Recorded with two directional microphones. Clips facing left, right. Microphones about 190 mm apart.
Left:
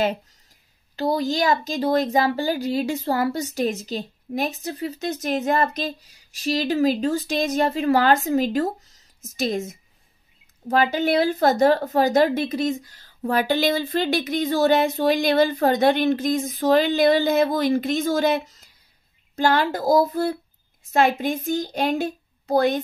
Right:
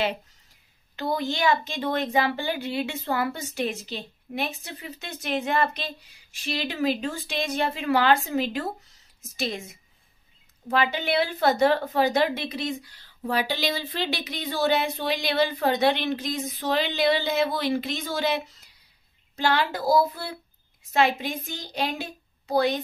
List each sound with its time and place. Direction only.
0.9 s a woman's voice: 35° left (ahead or behind)